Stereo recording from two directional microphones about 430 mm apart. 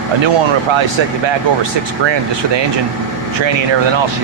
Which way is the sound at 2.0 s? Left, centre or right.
Right.